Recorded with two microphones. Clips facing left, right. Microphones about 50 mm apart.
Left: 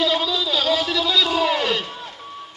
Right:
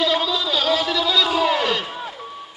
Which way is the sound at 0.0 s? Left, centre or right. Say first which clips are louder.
Right 1 dB; centre.